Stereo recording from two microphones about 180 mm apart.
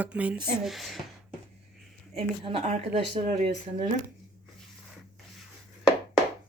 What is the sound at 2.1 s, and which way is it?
Speech, 35° right (ahead or behind).